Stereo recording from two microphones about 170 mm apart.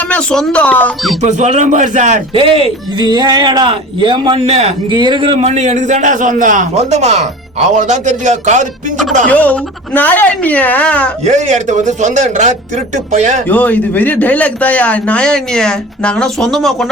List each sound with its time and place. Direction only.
0.1 s a man's voice: 5° left (ahead or behind)
1.2 s a man's voice: 45° right (ahead or behind)
2.3 s a man's voice: 30° right (ahead or behind)
9.2 s a man's voice: 10° left (ahead or behind)
11.3 s a man's voice: 45° right (ahead or behind)
13.5 s a man's voice: 10° left (ahead or behind)